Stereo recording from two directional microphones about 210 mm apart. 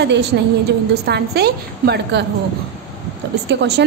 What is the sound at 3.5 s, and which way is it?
Speech, 55° right (ahead or behind).